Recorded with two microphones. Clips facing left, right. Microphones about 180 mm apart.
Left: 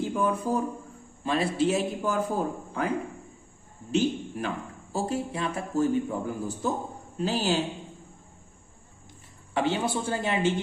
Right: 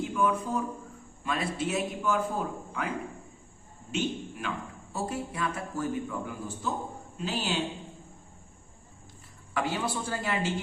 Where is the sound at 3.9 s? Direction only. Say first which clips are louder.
Left 6 dB; 35° left (ahead or behind).